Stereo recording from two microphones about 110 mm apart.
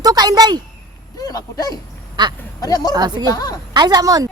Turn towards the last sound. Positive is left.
turn(degrees=-35)  # may be behind; listen again after turning